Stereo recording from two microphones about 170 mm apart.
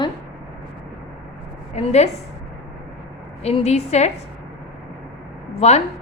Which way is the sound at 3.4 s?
40° left (ahead or behind).